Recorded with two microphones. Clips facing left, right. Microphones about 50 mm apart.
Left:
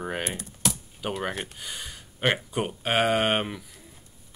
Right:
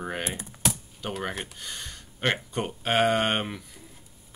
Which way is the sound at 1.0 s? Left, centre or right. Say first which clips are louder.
Left 2 dB; centre.